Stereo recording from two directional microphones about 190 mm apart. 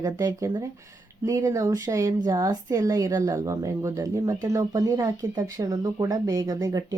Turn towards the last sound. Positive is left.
turn(degrees=-20)  # may be behind; listen again after turning